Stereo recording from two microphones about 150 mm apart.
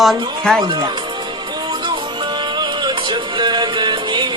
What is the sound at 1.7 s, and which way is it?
Music, 35° right (ahead or behind).